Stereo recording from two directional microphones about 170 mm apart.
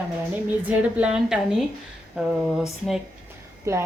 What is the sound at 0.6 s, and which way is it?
A woman's voice, 5° right (ahead or behind).